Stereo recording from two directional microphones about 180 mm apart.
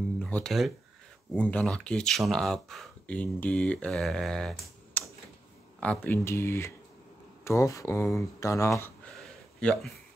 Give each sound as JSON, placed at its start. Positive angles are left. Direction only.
{"t": 0.2, "sound": "speech", "side_deg": 5}